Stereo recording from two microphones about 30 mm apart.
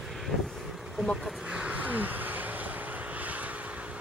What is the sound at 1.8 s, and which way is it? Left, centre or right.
Vehicle, right.